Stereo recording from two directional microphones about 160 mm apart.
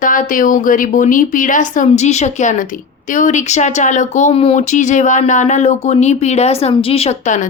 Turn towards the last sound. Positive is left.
turn(degrees=50)  # may be behind; listen again after turning